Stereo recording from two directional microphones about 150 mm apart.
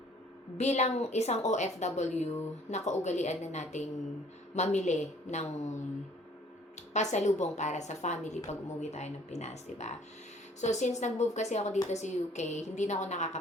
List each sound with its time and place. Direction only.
0.5 s a woman's voice: 50° left (ahead or behind)
6.9 s a woman's voice: 50° left (ahead or behind)